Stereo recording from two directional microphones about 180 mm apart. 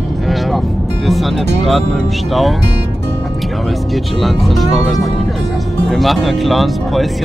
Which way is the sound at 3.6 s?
Centre (ahead or behind).